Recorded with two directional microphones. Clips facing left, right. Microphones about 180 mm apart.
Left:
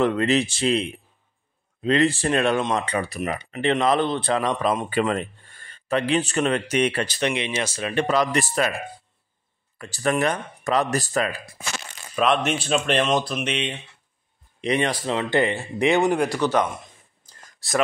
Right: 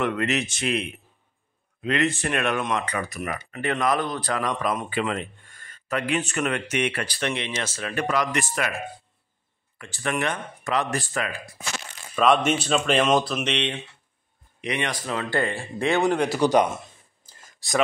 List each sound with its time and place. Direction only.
0.0 s speech: 30° left (ahead or behind)
4.8 s speech: 40° left (ahead or behind); by 7.9 s 15° left (ahead or behind)
7.9 s speech: 30° left (ahead or behind)
12.2 s speech: 5° left (ahead or behind)
14.6 s speech: 30° left (ahead or behind); by 16.3 s 15° left (ahead or behind)
16.3 s speech: 15° right (ahead or behind)
17.6 s speech: centre (ahead or behind)